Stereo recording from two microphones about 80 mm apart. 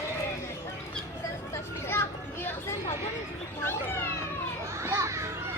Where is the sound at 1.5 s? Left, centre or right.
Left.